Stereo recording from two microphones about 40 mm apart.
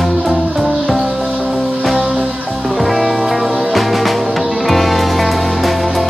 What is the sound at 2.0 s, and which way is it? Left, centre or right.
Music, right.